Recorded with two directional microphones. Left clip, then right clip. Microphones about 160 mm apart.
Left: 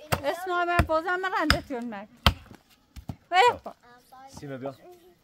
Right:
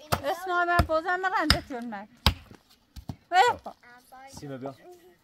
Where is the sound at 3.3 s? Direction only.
40° left (ahead or behind).